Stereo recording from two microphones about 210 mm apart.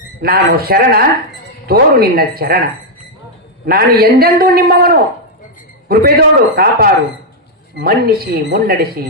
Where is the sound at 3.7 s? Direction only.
45° right (ahead or behind).